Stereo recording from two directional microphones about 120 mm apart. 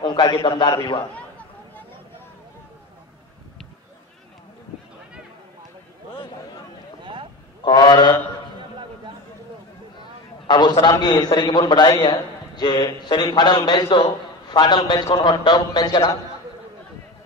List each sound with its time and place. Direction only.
0.0 s a man's voice: 35° left (ahead or behind)
7.6 s a man's voice: 35° left (ahead or behind)
10.5 s a man's voice: 35° left (ahead or behind)